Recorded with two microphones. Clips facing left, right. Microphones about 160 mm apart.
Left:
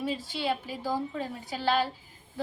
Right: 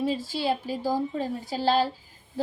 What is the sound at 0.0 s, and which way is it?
A woman's voice, 25° right (ahead or behind).